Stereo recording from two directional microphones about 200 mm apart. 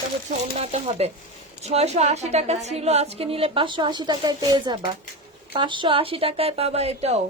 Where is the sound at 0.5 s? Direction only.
35° right (ahead or behind).